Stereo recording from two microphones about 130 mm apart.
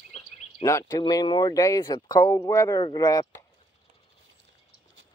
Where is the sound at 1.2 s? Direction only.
40° left (ahead or behind).